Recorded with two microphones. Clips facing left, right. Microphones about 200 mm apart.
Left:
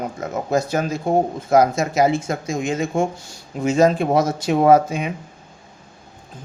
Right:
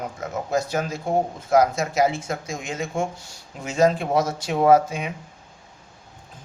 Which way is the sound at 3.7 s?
50° left (ahead or behind).